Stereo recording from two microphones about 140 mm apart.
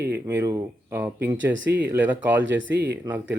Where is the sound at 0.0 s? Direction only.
15° right (ahead or behind).